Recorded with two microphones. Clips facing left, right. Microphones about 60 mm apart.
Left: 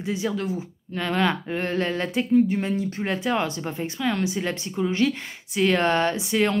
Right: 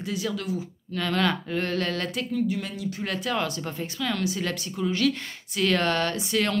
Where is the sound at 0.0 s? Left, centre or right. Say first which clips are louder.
Left 3 dB; left.